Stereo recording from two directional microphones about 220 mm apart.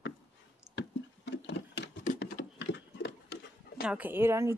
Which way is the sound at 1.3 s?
55° left (ahead or behind).